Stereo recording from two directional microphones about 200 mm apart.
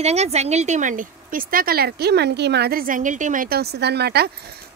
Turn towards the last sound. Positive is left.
turn(degrees=-55)  # may be behind; listen again after turning